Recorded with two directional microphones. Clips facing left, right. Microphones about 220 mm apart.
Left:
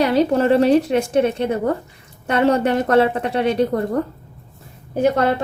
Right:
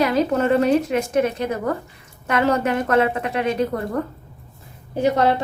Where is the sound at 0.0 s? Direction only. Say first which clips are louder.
Left 3 dB; 30° left (ahead or behind).